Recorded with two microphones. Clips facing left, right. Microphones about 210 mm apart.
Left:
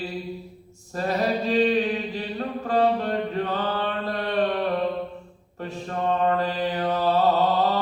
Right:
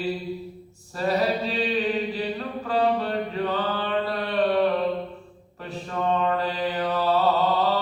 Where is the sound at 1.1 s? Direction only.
40° left (ahead or behind).